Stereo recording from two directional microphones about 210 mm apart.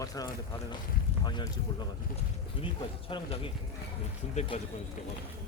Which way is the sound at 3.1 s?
25° left (ahead or behind).